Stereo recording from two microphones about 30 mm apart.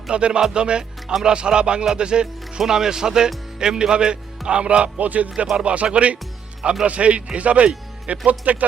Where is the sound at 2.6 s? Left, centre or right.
Centre.